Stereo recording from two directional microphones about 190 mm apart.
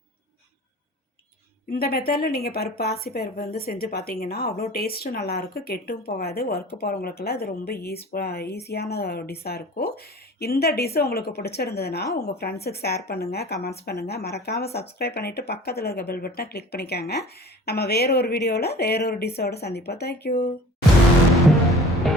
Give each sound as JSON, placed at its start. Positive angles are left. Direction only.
{"t": 1.7, "sound": "speech", "side_deg": 50}